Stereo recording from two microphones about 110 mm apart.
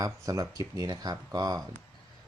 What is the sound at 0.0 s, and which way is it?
Speech, 30° right (ahead or behind).